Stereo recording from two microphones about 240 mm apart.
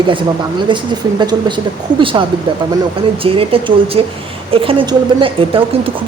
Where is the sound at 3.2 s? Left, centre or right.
Right.